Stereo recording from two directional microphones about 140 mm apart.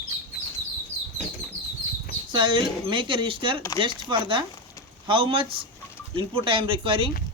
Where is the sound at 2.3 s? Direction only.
35° right (ahead or behind).